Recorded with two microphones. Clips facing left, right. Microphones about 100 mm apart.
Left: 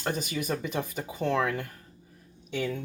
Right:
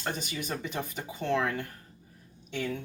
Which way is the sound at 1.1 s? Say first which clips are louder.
Left 2 dB; 15° left (ahead or behind).